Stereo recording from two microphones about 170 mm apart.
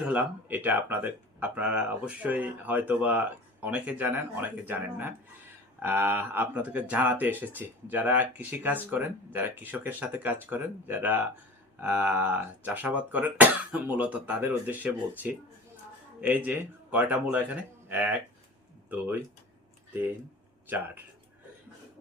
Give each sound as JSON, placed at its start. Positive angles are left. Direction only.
{"t": 0.0, "sound": "speech", "side_deg": -10}
{"t": 20.7, "sound": "speech", "side_deg": -10}